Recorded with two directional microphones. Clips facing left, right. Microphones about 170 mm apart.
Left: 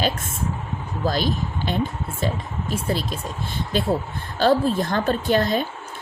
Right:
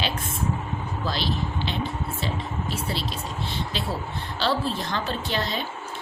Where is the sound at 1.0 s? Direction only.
45° left (ahead or behind).